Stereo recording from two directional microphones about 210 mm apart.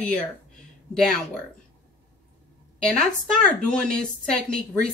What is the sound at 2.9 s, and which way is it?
Speech, 5° left (ahead or behind).